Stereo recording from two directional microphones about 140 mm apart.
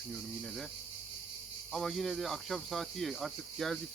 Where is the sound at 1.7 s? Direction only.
Centre (ahead or behind).